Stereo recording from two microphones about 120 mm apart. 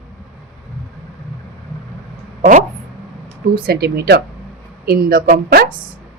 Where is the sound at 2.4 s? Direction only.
85° right.